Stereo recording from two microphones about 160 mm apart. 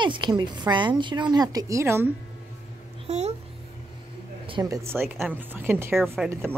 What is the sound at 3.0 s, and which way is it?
Speech, 45° right (ahead or behind).